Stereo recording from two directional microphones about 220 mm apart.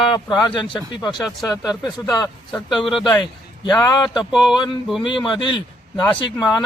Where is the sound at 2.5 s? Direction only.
Centre (ahead or behind).